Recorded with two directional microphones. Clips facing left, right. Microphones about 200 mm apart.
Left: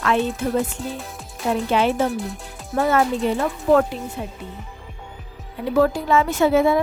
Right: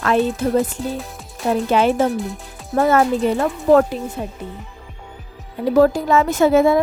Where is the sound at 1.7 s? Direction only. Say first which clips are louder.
Right 4 dB; 50° right (ahead or behind).